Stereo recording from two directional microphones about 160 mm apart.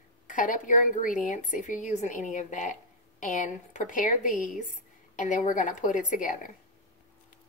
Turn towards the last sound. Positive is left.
turn(degrees=55)  # may be behind; listen again after turning